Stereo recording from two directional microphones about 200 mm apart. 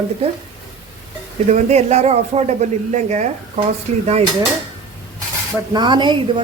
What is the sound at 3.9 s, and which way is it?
Speech, 35° right (ahead or behind).